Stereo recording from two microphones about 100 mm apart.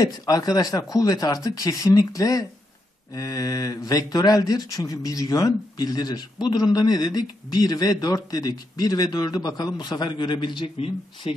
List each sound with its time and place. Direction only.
0.0 s speech: 40° left (ahead or behind)
10.8 s speech: 70° left (ahead or behind)